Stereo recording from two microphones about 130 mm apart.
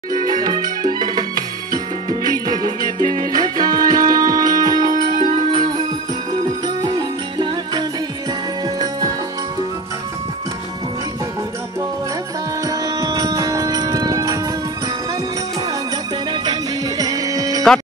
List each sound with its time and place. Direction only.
0.2 s music: 30° right (ahead or behind)
4.8 s music: 90° right
6.8 s music: 35° right (ahead or behind)
12.6 s music: 30° right (ahead or behind)
17.0 s music: 30° right (ahead or behind)